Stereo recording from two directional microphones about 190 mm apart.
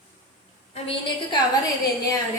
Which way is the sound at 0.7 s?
30° left (ahead or behind).